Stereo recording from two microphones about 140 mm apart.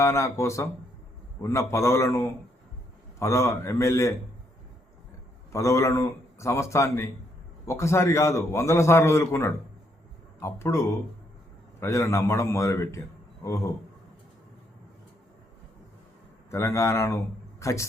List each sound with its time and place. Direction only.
0.0 s a man's voice: 20° left (ahead or behind)
5.5 s a man's voice: 20° left (ahead or behind)
16.5 s a man's voice: 20° left (ahead or behind)